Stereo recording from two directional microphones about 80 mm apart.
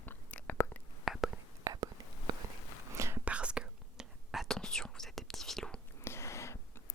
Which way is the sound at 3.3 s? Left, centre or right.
Centre.